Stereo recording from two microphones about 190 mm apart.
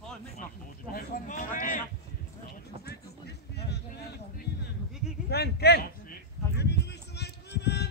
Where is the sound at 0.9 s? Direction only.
45° left (ahead or behind).